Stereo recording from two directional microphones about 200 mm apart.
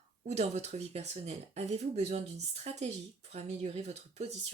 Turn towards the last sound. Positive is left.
turn(degrees=-30)  # may be behind; listen again after turning